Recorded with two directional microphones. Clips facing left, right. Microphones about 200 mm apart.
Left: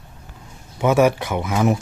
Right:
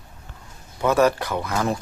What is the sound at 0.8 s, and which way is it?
Speech, 15° left (ahead or behind).